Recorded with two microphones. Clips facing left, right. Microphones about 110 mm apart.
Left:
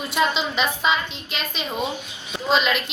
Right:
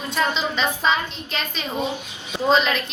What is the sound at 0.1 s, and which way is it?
A woman's voice, 15° left (ahead or behind).